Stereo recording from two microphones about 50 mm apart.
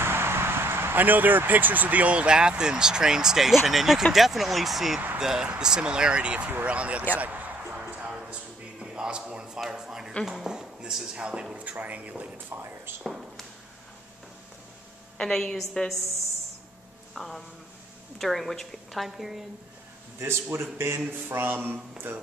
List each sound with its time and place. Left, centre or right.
0.0 s a sound: right
1.0 s speech: right
7.7 s music: right
8.8 s a sound: centre
11.1 s speech: centre
13.0 s a sound: centre
15.1 s a woman's voice: centre
17.1 s speech: centre
19.0 s speech: centre
20.7 s a man's voice: right
21.3 s speech: right